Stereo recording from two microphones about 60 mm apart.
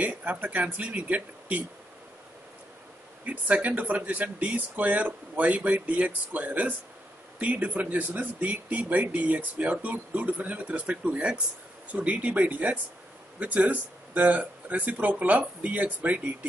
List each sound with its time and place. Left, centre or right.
0.0 s speech: right
3.3 s speech: right